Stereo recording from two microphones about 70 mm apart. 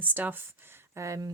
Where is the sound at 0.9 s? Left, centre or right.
Right.